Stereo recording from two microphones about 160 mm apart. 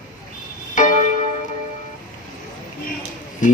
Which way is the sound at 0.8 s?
50° left (ahead or behind).